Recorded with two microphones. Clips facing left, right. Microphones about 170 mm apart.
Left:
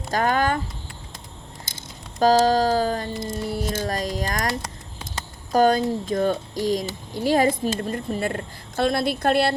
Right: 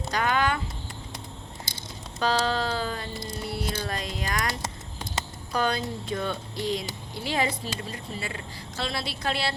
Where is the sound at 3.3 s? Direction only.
45° left (ahead or behind).